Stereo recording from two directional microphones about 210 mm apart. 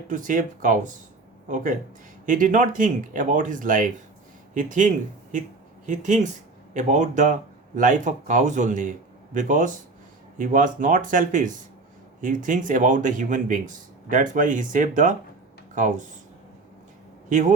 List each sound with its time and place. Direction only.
0.1 s speech: 35° right (ahead or behind)
17.2 s a man's voice: 35° right (ahead or behind)